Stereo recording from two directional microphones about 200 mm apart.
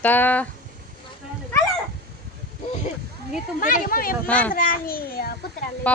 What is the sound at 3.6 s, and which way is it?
Speech, 40° left (ahead or behind).